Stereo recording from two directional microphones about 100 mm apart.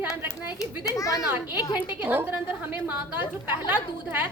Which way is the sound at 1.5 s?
45° left (ahead or behind).